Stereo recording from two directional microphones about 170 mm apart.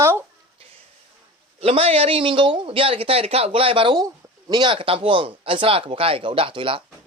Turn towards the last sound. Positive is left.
turn(degrees=-30)  # may be behind; listen again after turning